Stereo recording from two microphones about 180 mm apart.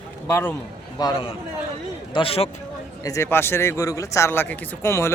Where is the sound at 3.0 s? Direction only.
15° left (ahead or behind).